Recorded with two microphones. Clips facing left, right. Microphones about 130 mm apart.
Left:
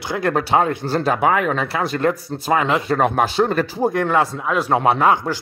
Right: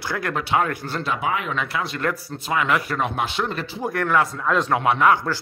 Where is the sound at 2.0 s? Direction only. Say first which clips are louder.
Left 6 dB; 20° left (ahead or behind).